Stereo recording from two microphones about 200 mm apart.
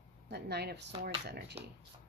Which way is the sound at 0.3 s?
55° right (ahead or behind).